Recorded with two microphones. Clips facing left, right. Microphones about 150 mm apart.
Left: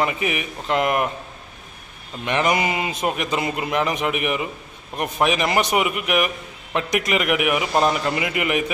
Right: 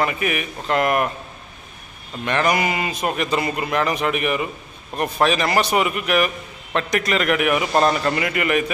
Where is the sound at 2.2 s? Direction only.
20° left (ahead or behind).